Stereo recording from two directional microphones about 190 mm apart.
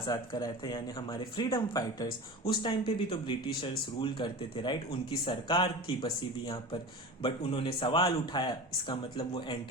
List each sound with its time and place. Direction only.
0.0 s speech: 20° left (ahead or behind)
7.2 s speech: 30° left (ahead or behind)